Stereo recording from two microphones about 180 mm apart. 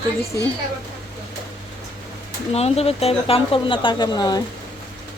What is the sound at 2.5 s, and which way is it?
A woman's voice, 35° left (ahead or behind).